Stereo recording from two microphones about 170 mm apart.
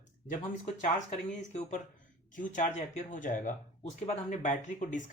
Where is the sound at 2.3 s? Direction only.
50° left (ahead or behind).